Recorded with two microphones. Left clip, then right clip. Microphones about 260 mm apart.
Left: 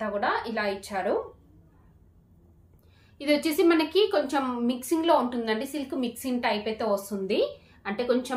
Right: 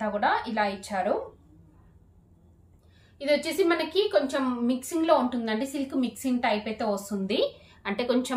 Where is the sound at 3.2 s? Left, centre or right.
Centre.